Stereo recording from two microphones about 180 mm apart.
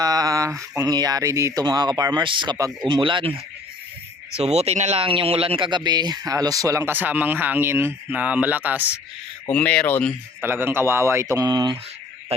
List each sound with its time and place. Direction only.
0.0 s a sound: 20° right (ahead or behind)
0.8 s speech: 20° right (ahead or behind)
4.4 s speech: 35° right (ahead or behind); by 9.0 s 10° right (ahead or behind)
9.5 s speech: 5° left (ahead or behind)
10.4 s speech: 10° right (ahead or behind)